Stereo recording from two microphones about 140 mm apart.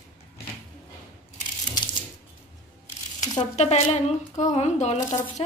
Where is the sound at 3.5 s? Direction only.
50° left (ahead or behind).